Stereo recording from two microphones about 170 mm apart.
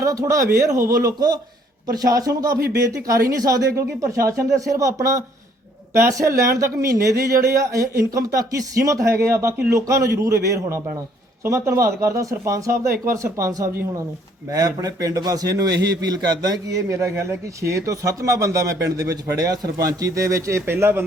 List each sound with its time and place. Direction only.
0.0 s a man's voice: 20° right (ahead or behind)